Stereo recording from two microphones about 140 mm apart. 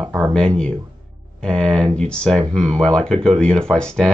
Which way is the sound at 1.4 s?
5° left (ahead or behind).